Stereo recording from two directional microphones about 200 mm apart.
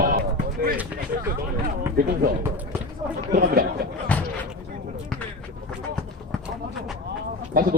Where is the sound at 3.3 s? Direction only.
50° right (ahead or behind).